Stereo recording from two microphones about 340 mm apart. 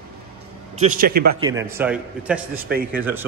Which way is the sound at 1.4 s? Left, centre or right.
Centre.